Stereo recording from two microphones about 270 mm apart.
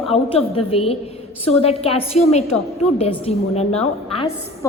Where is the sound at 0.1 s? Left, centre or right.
Left.